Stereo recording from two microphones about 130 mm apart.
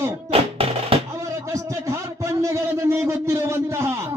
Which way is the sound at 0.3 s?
45° right (ahead or behind).